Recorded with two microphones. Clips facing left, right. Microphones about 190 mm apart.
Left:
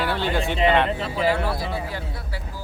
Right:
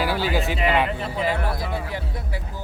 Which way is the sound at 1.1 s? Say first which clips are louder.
Left 3 dB; 20° right (ahead or behind).